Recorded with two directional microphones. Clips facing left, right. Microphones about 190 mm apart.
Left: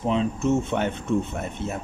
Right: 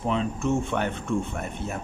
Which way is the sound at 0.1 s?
20° left (ahead or behind).